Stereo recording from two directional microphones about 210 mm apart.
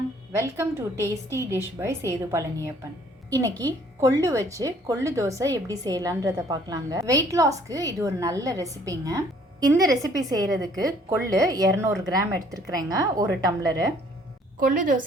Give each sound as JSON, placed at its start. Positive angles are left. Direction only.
{"t": 0.3, "sound": "a woman's voice", "side_deg": -15}
{"t": 4.0, "sound": "a woman's voice", "side_deg": -15}
{"t": 14.6, "sound": "a woman's voice", "side_deg": -40}